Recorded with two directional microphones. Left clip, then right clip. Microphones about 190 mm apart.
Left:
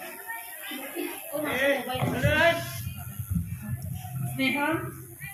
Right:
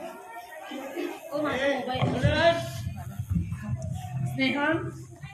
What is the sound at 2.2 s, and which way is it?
Speech, 30° right (ahead or behind).